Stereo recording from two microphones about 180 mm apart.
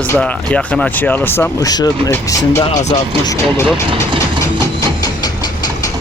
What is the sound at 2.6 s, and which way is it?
Speech, 40° left (ahead or behind).